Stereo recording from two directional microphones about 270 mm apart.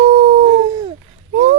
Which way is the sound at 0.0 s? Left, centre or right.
Right.